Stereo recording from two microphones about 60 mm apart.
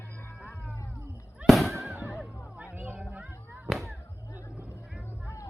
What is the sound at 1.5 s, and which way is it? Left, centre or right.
Fireworks, centre.